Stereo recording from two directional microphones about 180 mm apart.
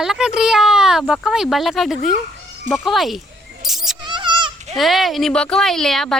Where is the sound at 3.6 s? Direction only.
Centre (ahead or behind).